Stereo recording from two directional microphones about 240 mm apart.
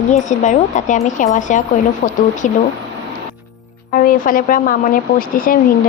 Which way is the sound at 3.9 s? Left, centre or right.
Left.